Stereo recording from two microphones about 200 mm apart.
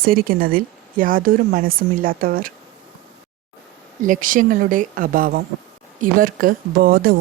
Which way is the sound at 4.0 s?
40° right (ahead or behind).